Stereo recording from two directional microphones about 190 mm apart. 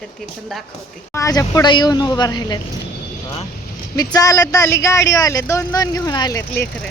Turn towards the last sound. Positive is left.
turn(degrees=15)  # may be behind; listen again after turning